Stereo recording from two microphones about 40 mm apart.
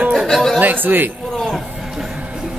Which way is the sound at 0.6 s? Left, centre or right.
Right.